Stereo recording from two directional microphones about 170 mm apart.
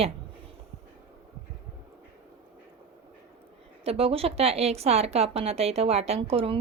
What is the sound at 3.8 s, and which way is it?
Speech, 35° right (ahead or behind).